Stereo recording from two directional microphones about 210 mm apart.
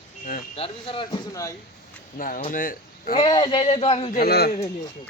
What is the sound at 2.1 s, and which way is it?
Speech, 40° left (ahead or behind).